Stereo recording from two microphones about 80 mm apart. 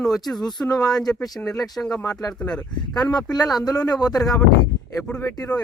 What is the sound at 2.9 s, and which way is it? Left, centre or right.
Speech, left.